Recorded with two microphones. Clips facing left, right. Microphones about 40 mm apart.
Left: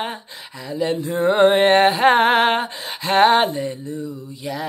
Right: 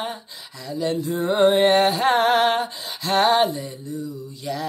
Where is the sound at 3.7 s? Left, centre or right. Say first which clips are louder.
Left 3 dB; left.